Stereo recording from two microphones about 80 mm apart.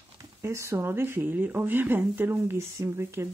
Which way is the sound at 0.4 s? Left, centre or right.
Right.